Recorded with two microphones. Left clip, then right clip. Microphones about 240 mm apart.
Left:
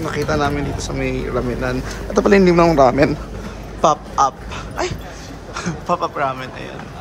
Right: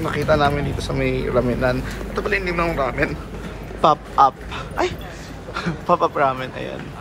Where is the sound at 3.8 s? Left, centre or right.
Centre.